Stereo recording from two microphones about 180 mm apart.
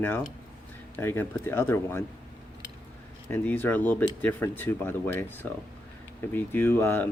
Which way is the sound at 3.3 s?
10° left (ahead or behind).